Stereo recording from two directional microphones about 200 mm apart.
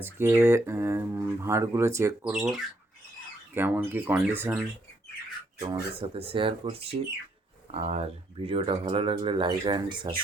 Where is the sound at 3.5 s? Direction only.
10° right (ahead or behind).